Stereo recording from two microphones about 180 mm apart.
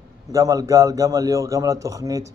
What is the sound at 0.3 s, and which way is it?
A man's voice, 20° right (ahead or behind).